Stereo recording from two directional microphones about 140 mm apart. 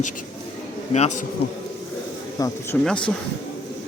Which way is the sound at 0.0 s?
70° left (ahead or behind).